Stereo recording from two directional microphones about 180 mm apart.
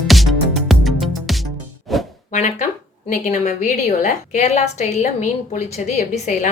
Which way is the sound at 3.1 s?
45° left (ahead or behind).